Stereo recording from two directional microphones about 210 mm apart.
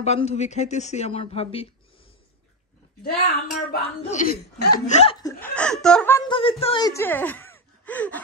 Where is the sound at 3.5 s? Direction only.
35° left (ahead or behind).